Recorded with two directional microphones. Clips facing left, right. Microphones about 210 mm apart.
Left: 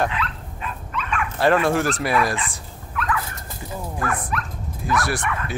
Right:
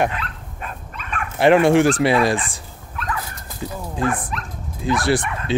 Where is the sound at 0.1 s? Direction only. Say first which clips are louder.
Left 2 dB; 45° right (ahead or behind).